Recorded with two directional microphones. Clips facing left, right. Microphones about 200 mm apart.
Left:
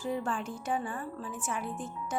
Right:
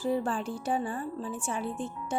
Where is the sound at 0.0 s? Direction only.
35° right (ahead or behind).